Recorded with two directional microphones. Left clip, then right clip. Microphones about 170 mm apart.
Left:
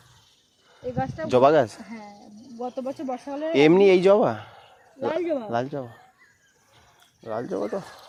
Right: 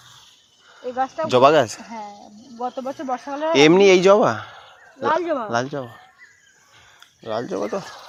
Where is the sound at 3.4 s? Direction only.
5° left (ahead or behind).